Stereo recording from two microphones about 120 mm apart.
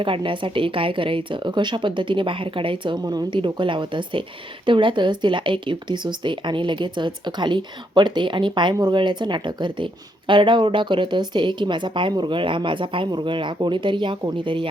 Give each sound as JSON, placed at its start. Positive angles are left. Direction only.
{"t": 0.0, "sound": "a woman's voice", "side_deg": -45}